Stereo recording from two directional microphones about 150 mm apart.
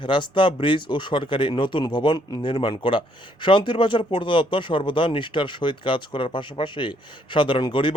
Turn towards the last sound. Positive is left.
turn(degrees=35)  # may be behind; listen again after turning